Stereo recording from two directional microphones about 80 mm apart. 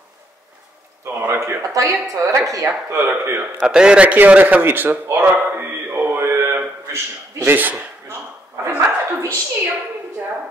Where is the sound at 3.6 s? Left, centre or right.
Centre.